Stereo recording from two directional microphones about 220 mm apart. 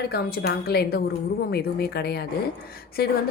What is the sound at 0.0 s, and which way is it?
A woman's voice, 45° left (ahead or behind).